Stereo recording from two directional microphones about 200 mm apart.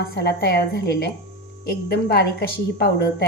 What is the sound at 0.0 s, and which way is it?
A woman's voice, 50° left (ahead or behind).